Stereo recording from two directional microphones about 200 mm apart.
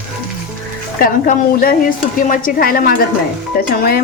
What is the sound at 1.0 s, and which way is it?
A woman's voice, 45° left (ahead or behind).